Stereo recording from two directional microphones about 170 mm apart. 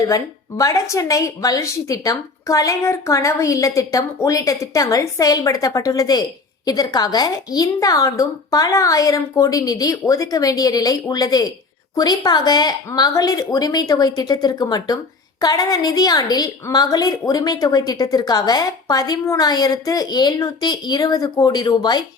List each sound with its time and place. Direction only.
0.1 s a woman's voice: 20° left (ahead or behind)